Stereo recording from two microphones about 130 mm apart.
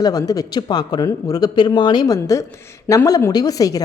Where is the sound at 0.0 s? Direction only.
30° left (ahead or behind).